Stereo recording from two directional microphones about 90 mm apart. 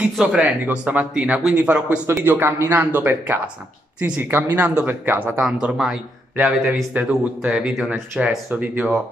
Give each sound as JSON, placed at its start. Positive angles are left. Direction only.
{"t": 0.0, "sound": "a man's voice", "side_deg": -15}
{"t": 5.4, "sound": "speech", "side_deg": -5}